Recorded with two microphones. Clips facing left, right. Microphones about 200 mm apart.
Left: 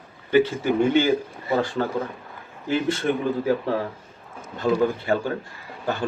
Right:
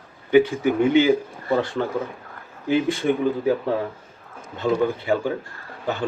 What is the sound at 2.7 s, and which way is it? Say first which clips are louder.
Speech: right 3 dB; 15° right (ahead or behind).